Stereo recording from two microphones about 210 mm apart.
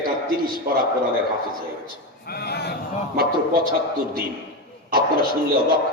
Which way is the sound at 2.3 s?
50° left (ahead or behind).